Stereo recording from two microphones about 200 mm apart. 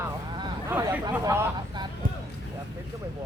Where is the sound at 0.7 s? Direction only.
10° right (ahead or behind).